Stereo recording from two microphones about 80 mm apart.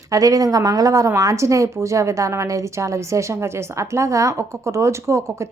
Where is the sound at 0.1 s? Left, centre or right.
Right.